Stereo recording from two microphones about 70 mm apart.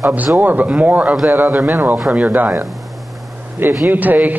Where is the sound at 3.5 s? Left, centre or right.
Right.